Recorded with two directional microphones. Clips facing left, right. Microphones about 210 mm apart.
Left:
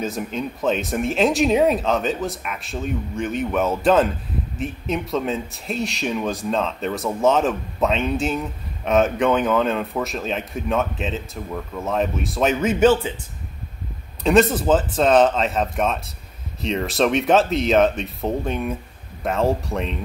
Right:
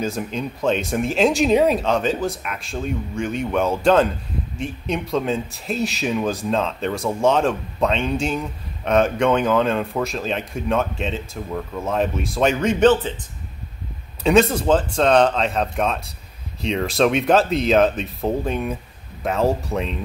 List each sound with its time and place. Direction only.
0.0 s speech: centre (ahead or behind)
14.2 s speech: centre (ahead or behind)